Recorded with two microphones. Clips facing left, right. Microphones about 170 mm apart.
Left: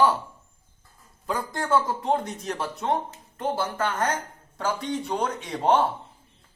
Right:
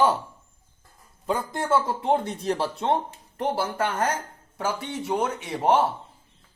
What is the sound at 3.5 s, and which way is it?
Speech, 10° right (ahead or behind).